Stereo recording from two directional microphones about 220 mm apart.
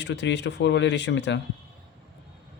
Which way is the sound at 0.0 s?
55° left (ahead or behind).